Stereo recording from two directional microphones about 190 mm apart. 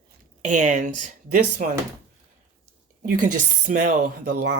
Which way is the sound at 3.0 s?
45° right (ahead or behind).